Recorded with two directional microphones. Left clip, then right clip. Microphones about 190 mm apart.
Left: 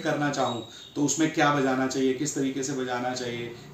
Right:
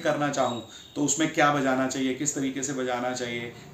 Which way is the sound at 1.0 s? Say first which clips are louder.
Right 1 dB; 5° right (ahead or behind).